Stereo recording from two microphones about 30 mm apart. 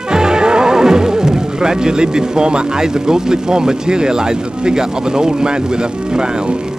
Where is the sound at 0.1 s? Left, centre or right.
Right.